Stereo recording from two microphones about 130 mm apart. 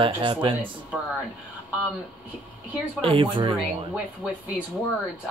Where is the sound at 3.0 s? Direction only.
45° right (ahead or behind).